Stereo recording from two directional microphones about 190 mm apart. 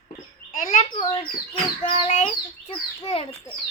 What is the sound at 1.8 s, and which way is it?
A child's voice, 35° left (ahead or behind).